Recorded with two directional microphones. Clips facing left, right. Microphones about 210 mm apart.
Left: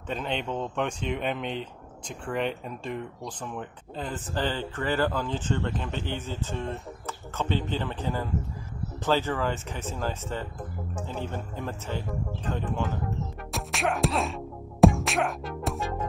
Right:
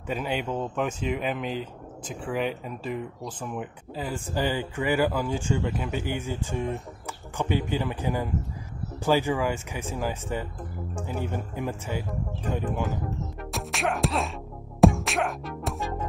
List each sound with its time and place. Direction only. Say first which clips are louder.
0.1 s speech: right 2 dB; 5° right (ahead or behind)
13.5 s music: even; centre (ahead or behind)